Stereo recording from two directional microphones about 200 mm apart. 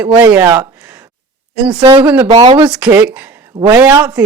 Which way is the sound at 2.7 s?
5° right (ahead or behind).